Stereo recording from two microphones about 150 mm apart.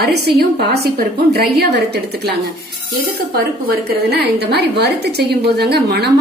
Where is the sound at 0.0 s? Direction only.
90° right.